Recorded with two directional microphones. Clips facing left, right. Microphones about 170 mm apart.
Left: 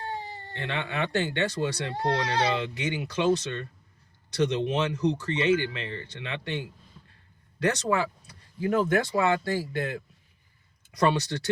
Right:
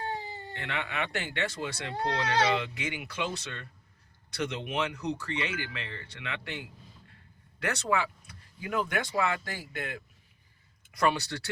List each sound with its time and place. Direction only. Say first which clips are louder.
0.5 s speech: left 4 dB; 30° left (ahead or behind)
11.0 s speech: left 3 dB; 30° left (ahead or behind)